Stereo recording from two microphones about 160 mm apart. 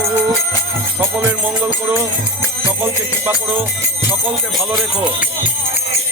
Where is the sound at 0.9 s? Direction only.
10° right (ahead or behind).